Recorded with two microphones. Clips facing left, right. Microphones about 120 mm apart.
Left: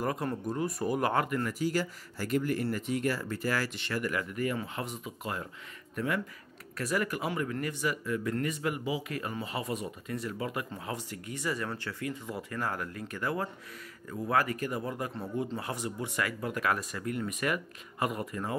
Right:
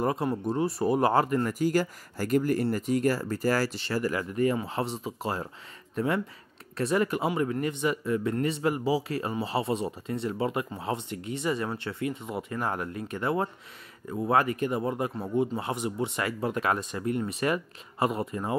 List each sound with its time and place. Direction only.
0.0 s speech: 25° right (ahead or behind)
1.5 s speech: 50° right (ahead or behind); by 18.6 s 25° right (ahead or behind)